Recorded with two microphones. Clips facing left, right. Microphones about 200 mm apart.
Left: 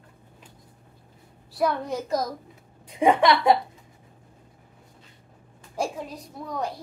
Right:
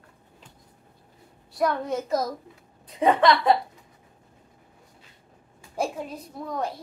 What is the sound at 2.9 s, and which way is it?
Speech, 15° left (ahead or behind).